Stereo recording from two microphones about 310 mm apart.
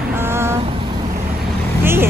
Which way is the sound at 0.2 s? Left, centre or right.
Centre.